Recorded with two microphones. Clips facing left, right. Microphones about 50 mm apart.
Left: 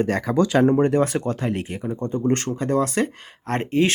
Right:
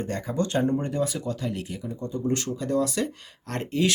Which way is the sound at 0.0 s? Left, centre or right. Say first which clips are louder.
Left 8 dB; left.